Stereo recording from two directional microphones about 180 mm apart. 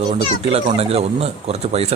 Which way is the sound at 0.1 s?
35° right (ahead or behind).